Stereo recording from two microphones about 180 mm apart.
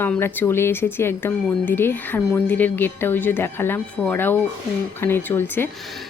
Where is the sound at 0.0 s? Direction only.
10° left (ahead or behind).